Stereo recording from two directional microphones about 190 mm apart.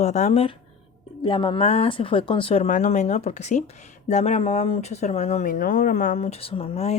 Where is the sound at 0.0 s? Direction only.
40° left (ahead or behind).